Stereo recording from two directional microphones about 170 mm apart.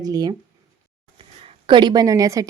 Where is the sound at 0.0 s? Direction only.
20° right (ahead or behind).